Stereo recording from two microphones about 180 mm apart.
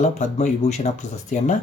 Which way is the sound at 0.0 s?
40° left (ahead or behind).